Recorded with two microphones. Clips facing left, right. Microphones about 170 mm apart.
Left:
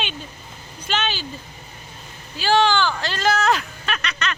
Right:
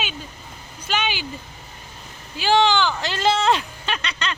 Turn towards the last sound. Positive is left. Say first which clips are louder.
# left 1 dB
turn(degrees=-30)  # may be behind; listen again after turning